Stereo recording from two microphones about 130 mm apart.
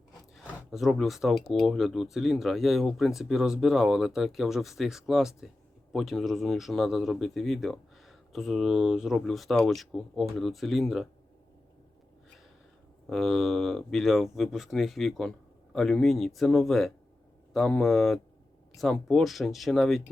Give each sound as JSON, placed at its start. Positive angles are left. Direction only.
{"t": 0.3, "sound": "speech", "side_deg": 0}
{"t": 13.1, "sound": "speech", "side_deg": 0}